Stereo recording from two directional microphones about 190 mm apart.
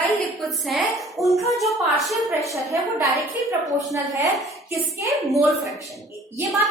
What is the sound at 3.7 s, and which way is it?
Speech, 15° right (ahead or behind).